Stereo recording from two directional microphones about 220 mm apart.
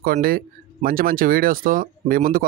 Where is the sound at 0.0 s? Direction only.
40° right (ahead or behind).